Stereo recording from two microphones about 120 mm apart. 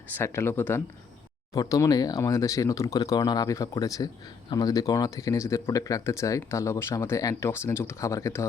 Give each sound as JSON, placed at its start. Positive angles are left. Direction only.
{"t": 0.1, "sound": "speech", "side_deg": 20}
{"t": 1.5, "sound": "speech", "side_deg": 30}